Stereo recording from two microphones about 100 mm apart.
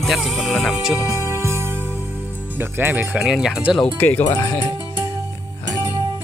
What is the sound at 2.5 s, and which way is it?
Speech, 20° right (ahead or behind).